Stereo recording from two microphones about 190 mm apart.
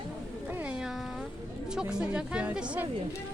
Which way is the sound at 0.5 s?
5° right (ahead or behind).